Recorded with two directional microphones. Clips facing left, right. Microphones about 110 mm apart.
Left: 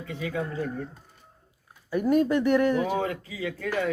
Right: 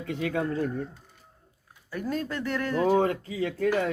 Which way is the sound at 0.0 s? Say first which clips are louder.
Right 3 dB; 60° right (ahead or behind).